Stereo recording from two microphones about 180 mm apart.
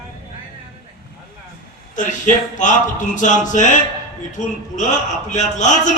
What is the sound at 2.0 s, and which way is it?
A man's voice, 45° left (ahead or behind).